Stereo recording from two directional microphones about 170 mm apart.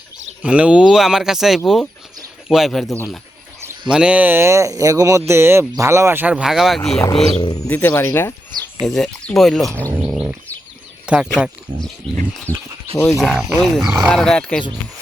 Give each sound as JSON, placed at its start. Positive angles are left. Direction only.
{"t": 0.4, "sound": "speech", "side_deg": -5}
{"t": 3.9, "sound": "speech", "side_deg": -5}
{"t": 7.3, "sound": "speech", "side_deg": 25}
{"t": 7.7, "sound": "speech", "side_deg": 10}
{"t": 8.8, "sound": "speech", "side_deg": 0}
{"t": 11.0, "sound": "a sound", "side_deg": -5}
{"t": 11.3, "sound": "speech", "side_deg": 0}